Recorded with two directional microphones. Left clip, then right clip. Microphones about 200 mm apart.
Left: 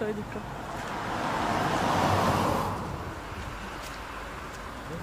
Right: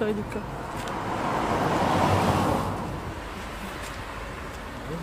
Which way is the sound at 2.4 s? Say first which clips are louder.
Right 2 dB; 30° left (ahead or behind).